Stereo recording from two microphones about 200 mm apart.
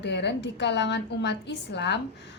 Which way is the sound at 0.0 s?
60° left (ahead or behind).